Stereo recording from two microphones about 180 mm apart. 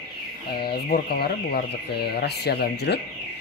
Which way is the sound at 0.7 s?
55° left (ahead or behind).